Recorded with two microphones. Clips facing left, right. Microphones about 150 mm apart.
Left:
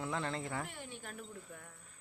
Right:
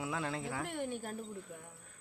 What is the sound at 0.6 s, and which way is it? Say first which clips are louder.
Speech: right 8 dB; 60° right (ahead or behind).